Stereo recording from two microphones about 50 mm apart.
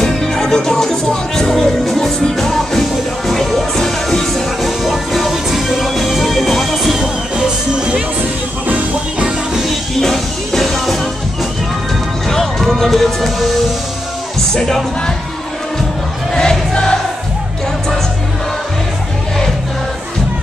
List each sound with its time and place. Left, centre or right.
0.0 s music: centre
4.6 s music: centre
7.7 s music: centre
9.2 s music: centre
9.7 s music: centre
12.3 s music: centre
14.5 s speech: centre
16.3 s choir: centre